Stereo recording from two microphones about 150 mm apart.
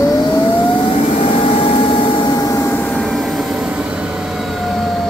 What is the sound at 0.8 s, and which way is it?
Vehicle, 35° left (ahead or behind).